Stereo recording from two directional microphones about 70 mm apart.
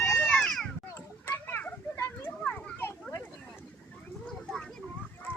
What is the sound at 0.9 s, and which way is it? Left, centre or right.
Children playing, left.